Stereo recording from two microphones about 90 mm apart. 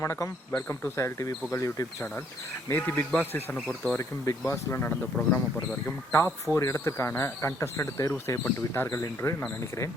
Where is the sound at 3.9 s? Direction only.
35° left (ahead or behind).